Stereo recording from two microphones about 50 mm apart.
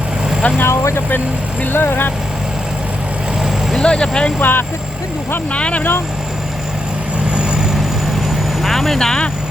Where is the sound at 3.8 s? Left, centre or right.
Centre.